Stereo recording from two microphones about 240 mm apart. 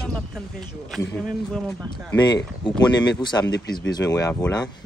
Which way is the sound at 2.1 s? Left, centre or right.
Centre.